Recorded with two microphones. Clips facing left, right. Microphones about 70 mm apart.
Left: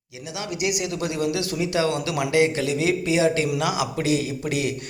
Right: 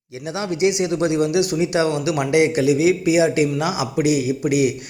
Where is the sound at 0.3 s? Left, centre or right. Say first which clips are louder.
Right 7 dB; right.